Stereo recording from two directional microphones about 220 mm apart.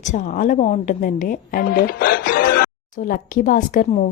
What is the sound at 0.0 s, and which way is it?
Speech, 35° left (ahead or behind).